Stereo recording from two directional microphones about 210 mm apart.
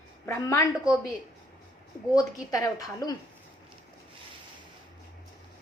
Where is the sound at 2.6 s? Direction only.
15° left (ahead or behind).